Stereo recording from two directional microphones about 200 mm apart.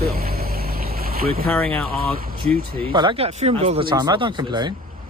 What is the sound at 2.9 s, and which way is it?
Speech, 25° right (ahead or behind).